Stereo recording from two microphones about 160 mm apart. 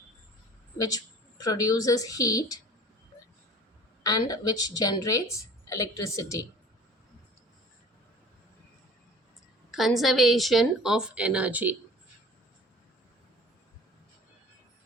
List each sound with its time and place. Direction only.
0.8 s a woman's voice: 25° left (ahead or behind)
4.0 s a woman's voice: 25° left (ahead or behind)
9.7 s a woman's voice: centre (ahead or behind)